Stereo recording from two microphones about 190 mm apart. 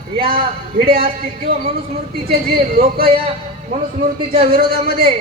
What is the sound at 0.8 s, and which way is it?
Speech, 50° right (ahead or behind).